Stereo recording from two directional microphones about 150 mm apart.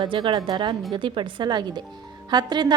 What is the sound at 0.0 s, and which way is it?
A woman's voice, 30° right (ahead or behind).